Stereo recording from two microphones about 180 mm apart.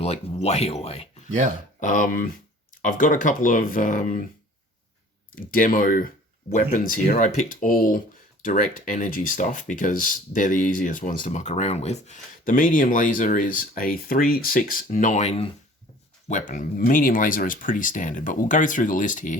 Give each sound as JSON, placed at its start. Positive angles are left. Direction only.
{"t": 0.0, "sound": "speech", "side_deg": 35}
{"t": 1.8, "sound": "speech", "side_deg": 50}
{"t": 5.3, "sound": "speech", "side_deg": 50}